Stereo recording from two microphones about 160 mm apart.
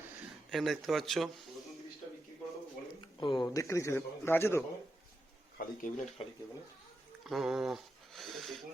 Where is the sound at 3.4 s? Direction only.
20° left (ahead or behind).